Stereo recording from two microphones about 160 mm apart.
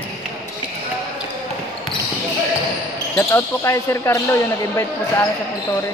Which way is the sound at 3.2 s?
15° left (ahead or behind).